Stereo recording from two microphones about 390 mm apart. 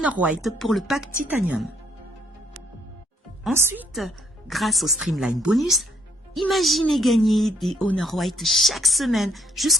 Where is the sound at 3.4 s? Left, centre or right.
Centre.